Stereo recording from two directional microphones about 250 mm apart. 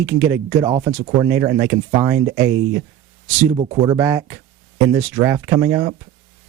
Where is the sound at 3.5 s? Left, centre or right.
Centre.